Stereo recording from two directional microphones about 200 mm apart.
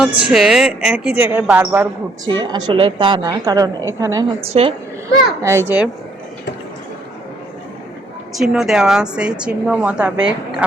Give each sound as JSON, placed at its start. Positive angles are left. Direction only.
{"t": 0.2, "sound": "a woman's voice", "side_deg": -5}
{"t": 4.4, "sound": "a woman's voice", "side_deg": -30}
{"t": 5.0, "sound": "a child's voice", "side_deg": -15}
{"t": 8.4, "sound": "a woman's voice", "side_deg": 0}